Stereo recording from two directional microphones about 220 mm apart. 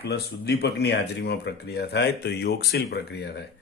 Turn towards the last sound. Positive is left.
turn(degrees=45)  # may be behind; listen again after turning